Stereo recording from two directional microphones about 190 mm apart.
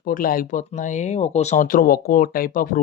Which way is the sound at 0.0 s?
45° left (ahead or behind).